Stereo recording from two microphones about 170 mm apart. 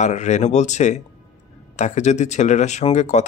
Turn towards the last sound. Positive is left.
turn(degrees=45)  # may be behind; listen again after turning